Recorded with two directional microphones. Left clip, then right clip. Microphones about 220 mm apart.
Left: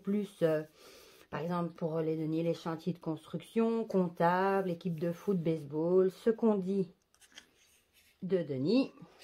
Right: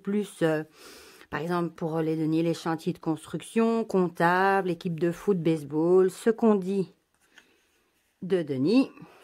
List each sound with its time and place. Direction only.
0.0 s speech: 50° right (ahead or behind)
8.3 s speech: 45° right (ahead or behind)